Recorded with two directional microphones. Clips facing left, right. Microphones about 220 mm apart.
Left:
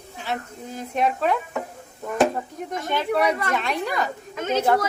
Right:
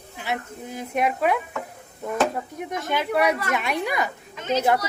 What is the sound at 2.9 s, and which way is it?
Speech, 5° right (ahead or behind).